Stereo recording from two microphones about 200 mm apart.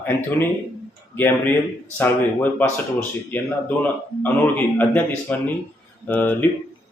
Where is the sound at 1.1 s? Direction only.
10° left (ahead or behind).